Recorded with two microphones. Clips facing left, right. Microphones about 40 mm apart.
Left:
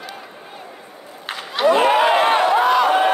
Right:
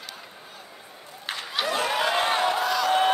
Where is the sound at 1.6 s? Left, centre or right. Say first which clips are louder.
Left 11 dB; left.